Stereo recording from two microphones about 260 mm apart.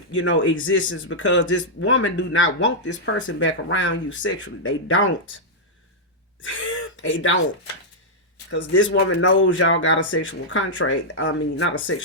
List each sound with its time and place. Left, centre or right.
0.1 s speech: left
6.4 s throat clearing: left
8.4 s speech: left